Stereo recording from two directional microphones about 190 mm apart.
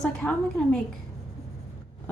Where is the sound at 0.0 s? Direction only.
5° left (ahead or behind).